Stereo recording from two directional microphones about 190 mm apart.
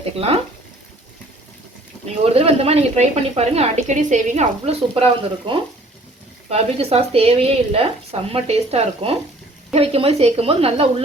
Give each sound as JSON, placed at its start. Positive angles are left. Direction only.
{"t": 0.0, "sound": "a woman's voice", "side_deg": -30}
{"t": 2.2, "sound": "a woman's voice", "side_deg": -30}
{"t": 5.5, "sound": "stir", "side_deg": -25}
{"t": 6.5, "sound": "a woman's voice", "side_deg": -30}